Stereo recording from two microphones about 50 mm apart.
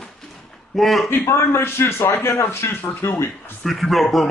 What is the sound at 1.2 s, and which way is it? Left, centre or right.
A man's voice, left.